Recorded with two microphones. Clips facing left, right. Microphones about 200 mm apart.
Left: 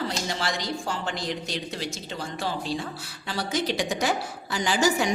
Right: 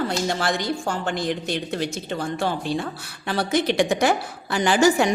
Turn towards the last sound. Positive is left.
turn(degrees=-55)  # may be behind; listen again after turning